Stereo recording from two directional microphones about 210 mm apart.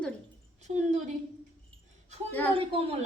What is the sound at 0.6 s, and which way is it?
Speech, 35° right (ahead or behind).